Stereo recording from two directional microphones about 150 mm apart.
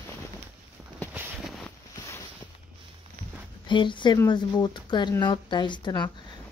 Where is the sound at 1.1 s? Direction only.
10° right (ahead or behind).